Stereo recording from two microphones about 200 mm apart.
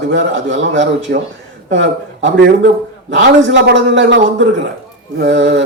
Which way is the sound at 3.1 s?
65° right (ahead or behind).